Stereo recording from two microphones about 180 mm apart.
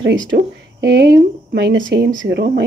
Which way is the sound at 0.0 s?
90° right.